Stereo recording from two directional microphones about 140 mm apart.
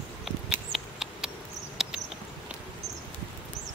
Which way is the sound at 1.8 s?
5° right (ahead or behind).